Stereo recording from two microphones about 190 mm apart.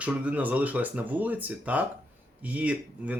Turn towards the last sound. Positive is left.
turn(degrees=-5)  # may be behind; listen again after turning